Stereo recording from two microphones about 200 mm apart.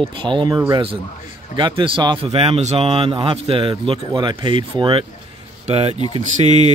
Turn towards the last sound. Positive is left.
turn(degrees=-35)  # may be behind; listen again after turning